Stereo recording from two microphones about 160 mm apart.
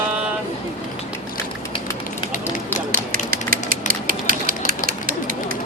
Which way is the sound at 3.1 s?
60° right (ahead or behind).